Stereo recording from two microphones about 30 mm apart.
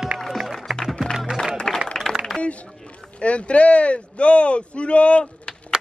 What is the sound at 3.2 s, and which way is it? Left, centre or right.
Speech, left.